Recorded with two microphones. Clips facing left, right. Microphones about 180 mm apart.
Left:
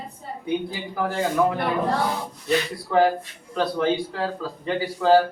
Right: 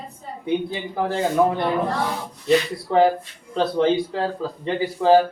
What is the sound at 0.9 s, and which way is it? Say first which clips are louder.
A man's voice: right 2 dB; 25° right (ahead or behind).